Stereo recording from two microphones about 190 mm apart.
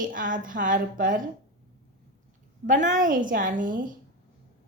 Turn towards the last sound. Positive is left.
turn(degrees=-45)  # may be behind; listen again after turning